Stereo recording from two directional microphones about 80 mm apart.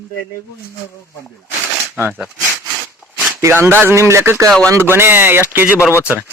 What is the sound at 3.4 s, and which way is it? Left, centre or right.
A man's voice, right.